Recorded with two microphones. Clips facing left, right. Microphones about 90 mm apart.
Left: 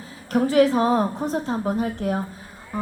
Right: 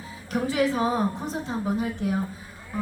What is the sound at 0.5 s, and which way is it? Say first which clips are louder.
A woman's voice: left 6 dB; 40° left (ahead or behind).